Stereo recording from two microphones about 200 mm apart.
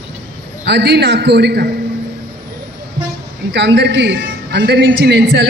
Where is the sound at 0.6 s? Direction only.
60° right (ahead or behind).